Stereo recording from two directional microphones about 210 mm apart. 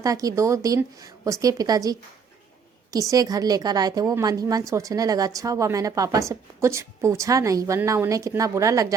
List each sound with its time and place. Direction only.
0.0 s a woman's voice: 15° right (ahead or behind)